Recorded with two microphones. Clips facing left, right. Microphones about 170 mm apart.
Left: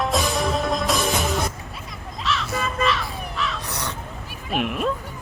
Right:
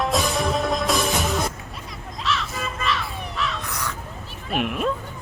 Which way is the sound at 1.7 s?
Centre (ahead or behind).